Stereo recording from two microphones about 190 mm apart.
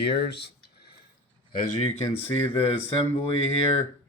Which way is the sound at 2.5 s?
30° left (ahead or behind).